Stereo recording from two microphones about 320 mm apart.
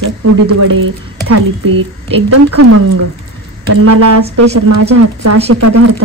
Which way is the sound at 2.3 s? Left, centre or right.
Right.